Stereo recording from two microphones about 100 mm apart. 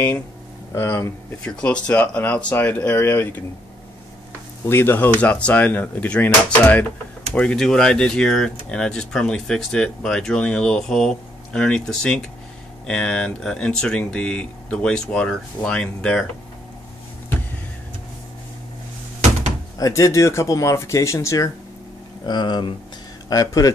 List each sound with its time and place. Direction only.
0.7 s speech: 25° left (ahead or behind)
1.4 s speech: 10° left (ahead or behind)
4.6 s speech: 25° left (ahead or behind)
7.3 s speech: 5° left (ahead or behind)
19.8 s speech: 30° left (ahead or behind)
22.2 s speech: 50° left (ahead or behind)
23.3 s speech: 35° left (ahead or behind)